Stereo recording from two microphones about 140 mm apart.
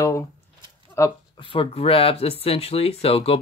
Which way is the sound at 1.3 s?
35° left (ahead or behind).